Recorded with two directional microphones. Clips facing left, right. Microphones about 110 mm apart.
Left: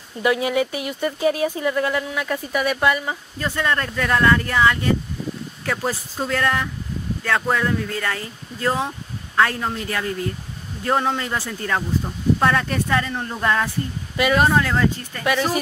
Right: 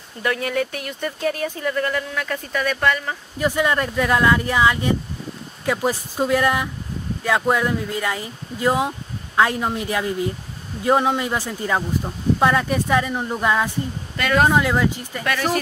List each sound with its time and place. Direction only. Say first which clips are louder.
0.2 s speech: left 3 dB; 10° left (ahead or behind)
3.3 s speech: right 4 dB; 15° right (ahead or behind)
14.1 s speech: even; 5° left (ahead or behind)
14.5 s speech: right 1 dB; 10° right (ahead or behind)
15.2 s speech: left 1 dB; 10° left (ahead or behind)